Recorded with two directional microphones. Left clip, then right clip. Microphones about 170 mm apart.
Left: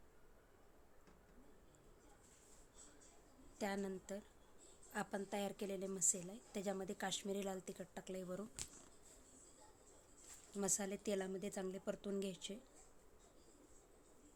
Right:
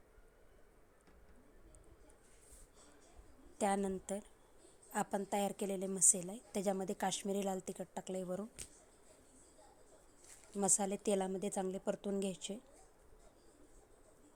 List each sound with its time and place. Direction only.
3.6 s a woman's voice: 35° right (ahead or behind)
10.6 s a woman's voice: 30° right (ahead or behind)